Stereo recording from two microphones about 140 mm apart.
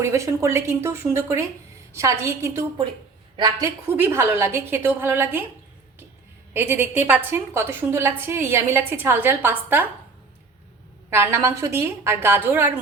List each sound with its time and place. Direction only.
0.0 s speech: 20° right (ahead or behind)
3.3 s speech: 30° right (ahead or behind)
3.8 s a woman's voice: 15° right (ahead or behind)
6.5 s a woman's voice: 15° right (ahead or behind)
11.1 s a woman's voice: 15° right (ahead or behind)